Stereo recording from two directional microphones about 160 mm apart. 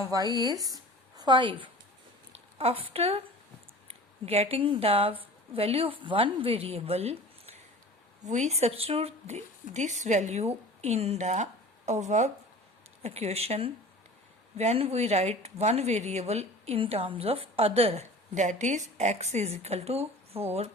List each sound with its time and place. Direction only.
0.0 s a woman's voice: 25° right (ahead or behind); by 20.7 s 40° right (ahead or behind)